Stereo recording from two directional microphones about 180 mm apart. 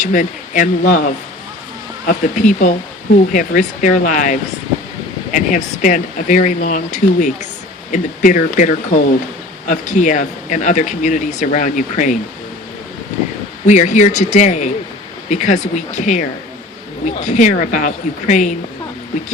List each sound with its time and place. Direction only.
0.0 s speech: 45° left (ahead or behind)
13.7 s speech: 40° left (ahead or behind)